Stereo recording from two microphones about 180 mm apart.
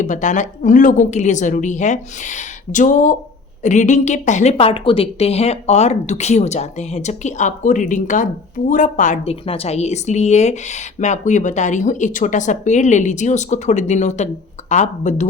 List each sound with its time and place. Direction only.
0.0 s a woman's voice: 45° left (ahead or behind)
4.5 s a woman's voice: 30° left (ahead or behind)